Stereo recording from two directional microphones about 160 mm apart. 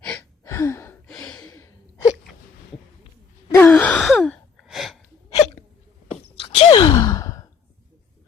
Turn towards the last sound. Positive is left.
turn(degrees=20)  # may be behind; listen again after turning